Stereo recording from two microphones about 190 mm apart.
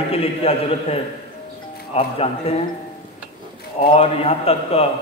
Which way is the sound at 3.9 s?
30° left (ahead or behind).